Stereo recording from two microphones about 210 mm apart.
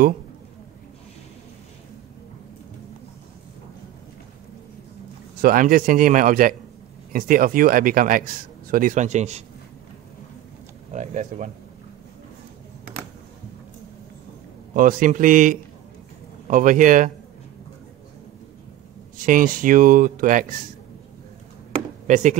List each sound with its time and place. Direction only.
5.4 s speech: 40° right (ahead or behind)
10.9 s speech: 35° right (ahead or behind)
14.7 s speech: 40° right (ahead or behind)
19.1 s speech: 40° right (ahead or behind)
22.0 s speech: 35° right (ahead or behind)